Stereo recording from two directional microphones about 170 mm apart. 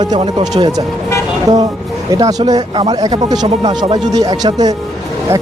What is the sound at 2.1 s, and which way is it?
Speech, 25° right (ahead or behind).